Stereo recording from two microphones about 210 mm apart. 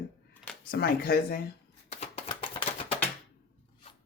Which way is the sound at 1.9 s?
30° left (ahead or behind).